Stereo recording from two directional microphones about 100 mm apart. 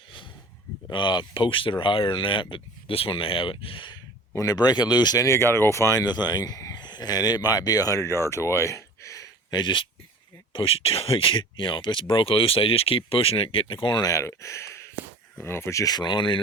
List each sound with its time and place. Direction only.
0.9 s speech: 50° left (ahead or behind)
4.4 s speech: 40° left (ahead or behind)
9.6 s speech: 50° left (ahead or behind)
10.5 s speech: 65° left (ahead or behind)
14.0 s speech: 30° left (ahead or behind); by 16.4 s 55° left (ahead or behind)